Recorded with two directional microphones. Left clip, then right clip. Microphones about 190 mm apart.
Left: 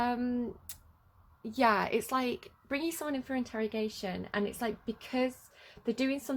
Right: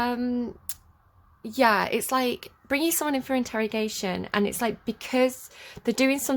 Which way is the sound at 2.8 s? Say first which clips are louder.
Right 10 dB; 35° right (ahead or behind).